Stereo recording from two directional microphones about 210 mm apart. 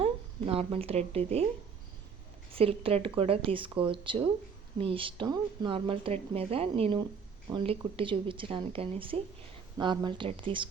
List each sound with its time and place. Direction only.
0.0 s speech: 30° right (ahead or behind)
2.6 s speech: 25° right (ahead or behind)